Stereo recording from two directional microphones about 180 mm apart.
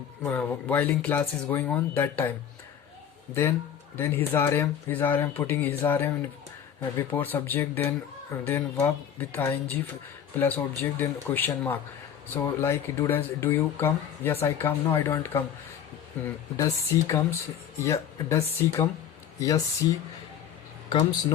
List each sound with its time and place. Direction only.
0.3 s speech: 10° left (ahead or behind)
3.9 s speech: 10° left (ahead or behind)
7.1 s speech: 10° left (ahead or behind)
20.9 s speech: 30° left (ahead or behind)